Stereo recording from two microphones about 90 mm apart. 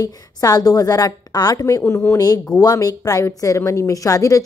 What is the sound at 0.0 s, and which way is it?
A woman's voice, 40° left (ahead or behind).